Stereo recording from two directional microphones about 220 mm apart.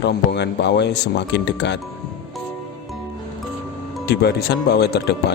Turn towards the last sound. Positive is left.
turn(degrees=45)  # may be behind; listen again after turning